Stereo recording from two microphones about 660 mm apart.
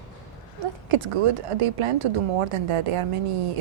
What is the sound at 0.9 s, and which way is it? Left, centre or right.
Speech, right.